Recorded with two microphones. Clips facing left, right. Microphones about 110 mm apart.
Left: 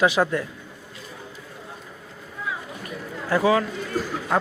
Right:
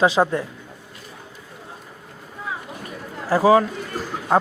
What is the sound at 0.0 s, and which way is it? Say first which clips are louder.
Speech: right 2 dB; 30° right (ahead or behind).